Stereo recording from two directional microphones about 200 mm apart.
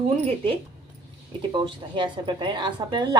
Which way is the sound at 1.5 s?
25° right (ahead or behind).